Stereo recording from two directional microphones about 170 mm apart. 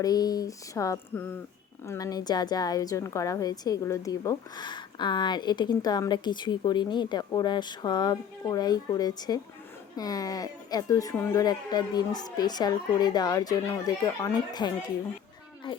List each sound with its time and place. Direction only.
0.0 s a woman's voice: 20° left (ahead or behind)